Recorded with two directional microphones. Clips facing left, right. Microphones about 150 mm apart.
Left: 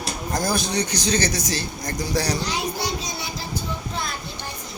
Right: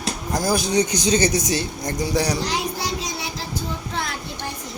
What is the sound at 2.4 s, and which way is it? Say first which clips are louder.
Child singing: right 1 dB; 90° right.